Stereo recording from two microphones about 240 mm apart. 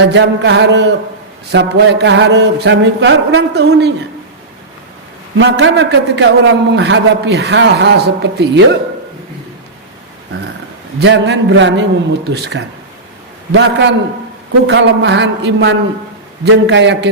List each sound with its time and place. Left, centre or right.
0.1 s a man's voice: right
5.4 s a man's voice: right
11.0 s a man's voice: right